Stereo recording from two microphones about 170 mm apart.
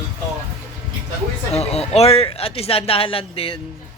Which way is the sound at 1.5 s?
35° left (ahead or behind).